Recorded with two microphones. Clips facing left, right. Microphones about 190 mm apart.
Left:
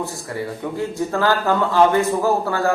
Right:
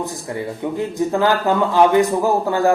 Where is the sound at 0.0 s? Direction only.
20° right (ahead or behind).